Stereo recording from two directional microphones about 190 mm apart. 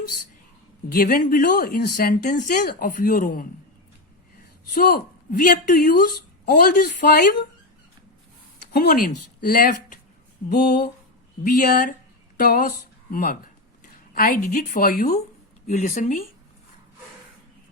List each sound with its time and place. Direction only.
0.9 s speech: 50° left (ahead or behind)
4.7 s speech: 50° left (ahead or behind)
8.7 s speech: 50° left (ahead or behind)
10.5 s a sound: 55° left (ahead or behind)
11.4 s speech: 45° left (ahead or behind)